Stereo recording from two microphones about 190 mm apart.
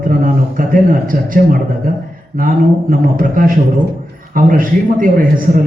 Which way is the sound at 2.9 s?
45° right (ahead or behind).